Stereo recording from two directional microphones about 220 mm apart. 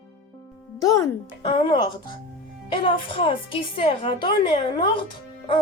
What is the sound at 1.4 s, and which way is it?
Speech, 25° left (ahead or behind).